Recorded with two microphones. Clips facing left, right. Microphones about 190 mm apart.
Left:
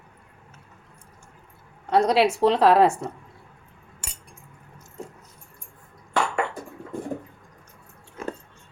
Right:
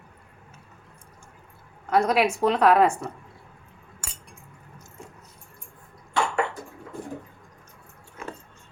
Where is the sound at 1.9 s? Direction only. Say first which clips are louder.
Left 2 dB; 25° left (ahead or behind).